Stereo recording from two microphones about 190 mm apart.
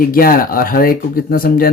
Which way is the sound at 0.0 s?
50° left (ahead or behind).